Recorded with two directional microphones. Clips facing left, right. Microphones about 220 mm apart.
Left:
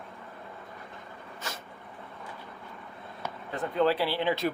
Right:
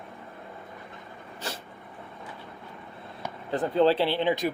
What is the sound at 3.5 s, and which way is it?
Speech, 30° right (ahead or behind).